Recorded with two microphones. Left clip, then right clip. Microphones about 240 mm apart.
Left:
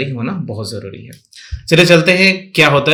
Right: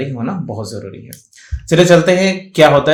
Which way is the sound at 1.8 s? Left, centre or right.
Left.